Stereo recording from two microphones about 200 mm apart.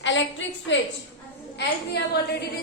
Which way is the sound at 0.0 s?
65° left (ahead or behind).